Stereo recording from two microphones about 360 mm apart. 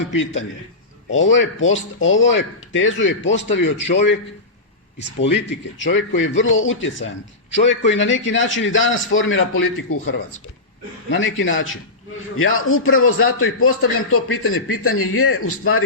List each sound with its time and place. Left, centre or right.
1.1 s a man's voice: left
5.5 s a man's voice: left